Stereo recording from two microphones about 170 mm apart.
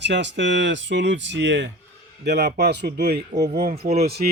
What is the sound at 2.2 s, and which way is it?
Speech, 75° right (ahead or behind).